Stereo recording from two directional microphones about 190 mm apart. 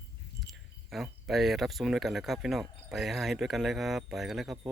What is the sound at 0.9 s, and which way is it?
Speech, centre (ahead or behind).